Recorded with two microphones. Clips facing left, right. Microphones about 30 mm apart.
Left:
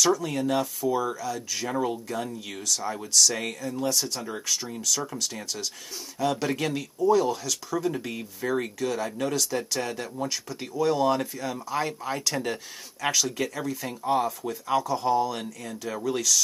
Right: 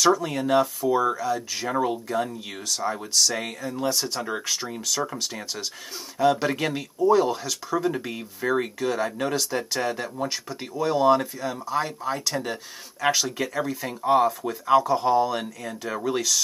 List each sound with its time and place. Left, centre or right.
0.0 s speech: centre
13.1 s speech: centre